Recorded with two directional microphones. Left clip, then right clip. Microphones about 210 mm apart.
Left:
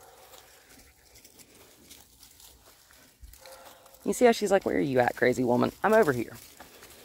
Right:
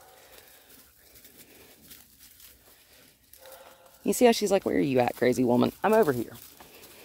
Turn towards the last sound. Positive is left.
turn(degrees=-5)  # may be behind; listen again after turning